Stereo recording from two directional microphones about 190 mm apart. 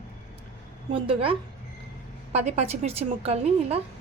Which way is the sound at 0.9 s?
30° right (ahead or behind).